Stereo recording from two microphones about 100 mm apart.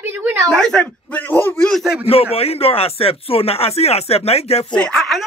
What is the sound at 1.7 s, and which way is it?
Speech, centre (ahead or behind).